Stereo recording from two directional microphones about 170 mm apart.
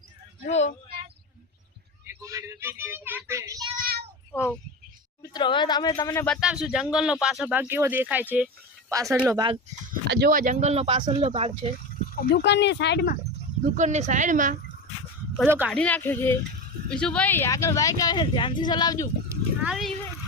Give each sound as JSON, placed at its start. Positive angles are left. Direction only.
{"t": 0.4, "sound": "speech", "side_deg": 40}
{"t": 2.2, "sound": "speech", "side_deg": -15}
{"t": 3.8, "sound": "child singing", "side_deg": -60}
{"t": 4.3, "sound": "speech", "side_deg": 15}
{"t": 5.3, "sound": "speech", "side_deg": 25}
{"t": 6.2, "sound": "speech", "side_deg": 0}
{"t": 10.2, "sound": "speech", "side_deg": -50}
{"t": 12.1, "sound": "speech", "side_deg": 65}
{"t": 13.7, "sound": "a woman's voice", "side_deg": -45}
{"t": 15.4, "sound": "speech", "side_deg": -10}
{"t": 15.7, "sound": "speech", "side_deg": 10}
{"t": 19.6, "sound": "speech", "side_deg": 0}